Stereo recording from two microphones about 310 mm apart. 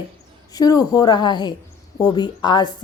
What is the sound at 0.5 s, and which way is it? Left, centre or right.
A woman's voice, centre.